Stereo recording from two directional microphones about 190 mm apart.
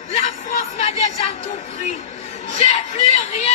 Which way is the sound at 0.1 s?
35° left (ahead or behind).